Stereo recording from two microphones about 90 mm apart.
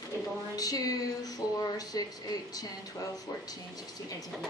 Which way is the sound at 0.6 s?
45° left (ahead or behind).